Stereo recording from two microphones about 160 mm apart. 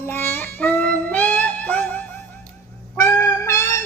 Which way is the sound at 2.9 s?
20° left (ahead or behind).